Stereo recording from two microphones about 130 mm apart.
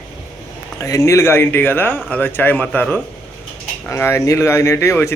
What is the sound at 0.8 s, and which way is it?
Speech, 25° left (ahead or behind).